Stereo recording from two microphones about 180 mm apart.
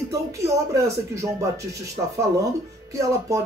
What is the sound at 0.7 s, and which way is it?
Speech, 15° right (ahead or behind).